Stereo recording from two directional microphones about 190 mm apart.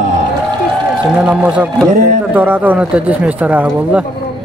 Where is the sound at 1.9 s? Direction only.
40° right (ahead or behind).